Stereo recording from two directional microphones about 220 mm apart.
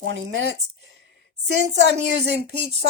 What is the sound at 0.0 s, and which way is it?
Speech, 55° right (ahead or behind).